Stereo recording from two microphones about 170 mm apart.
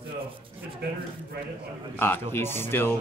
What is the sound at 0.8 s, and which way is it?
Speech, 70° right (ahead or behind).